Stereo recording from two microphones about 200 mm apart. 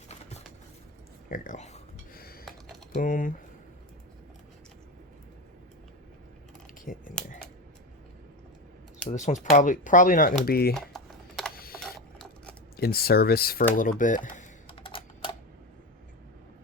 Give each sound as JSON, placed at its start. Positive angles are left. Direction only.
{"t": 1.3, "sound": "speech", "side_deg": 40}
{"t": 2.1, "sound": "a sound", "side_deg": 50}
{"t": 2.9, "sound": "speech", "side_deg": 40}
{"t": 7.2, "sound": "scissors", "side_deg": 5}
{"t": 9.0, "sound": "speech", "side_deg": 35}
{"t": 10.8, "sound": "computer keyboard", "side_deg": 0}
{"t": 11.5, "sound": "mechanisms", "side_deg": 50}
{"t": 11.8, "sound": "printer", "side_deg": 5}
{"t": 12.7, "sound": "speech", "side_deg": 50}
{"t": 14.7, "sound": "typing", "side_deg": 25}